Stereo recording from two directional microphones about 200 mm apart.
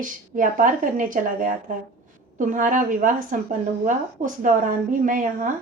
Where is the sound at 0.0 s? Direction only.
40° right (ahead or behind).